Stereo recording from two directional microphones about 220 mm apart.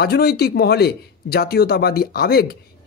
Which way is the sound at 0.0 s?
45° left (ahead or behind).